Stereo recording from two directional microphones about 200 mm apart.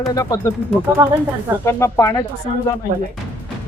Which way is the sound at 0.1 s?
15° left (ahead or behind).